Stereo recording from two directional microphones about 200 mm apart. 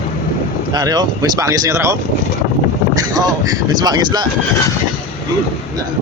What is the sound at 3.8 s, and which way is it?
Speech, 20° right (ahead or behind).